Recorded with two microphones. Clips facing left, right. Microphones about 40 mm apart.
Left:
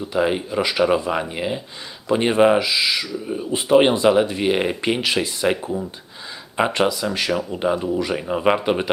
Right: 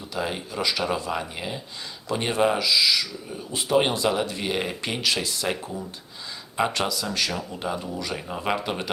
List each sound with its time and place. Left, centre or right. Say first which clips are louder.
0.1 s speech: left 9 dB; left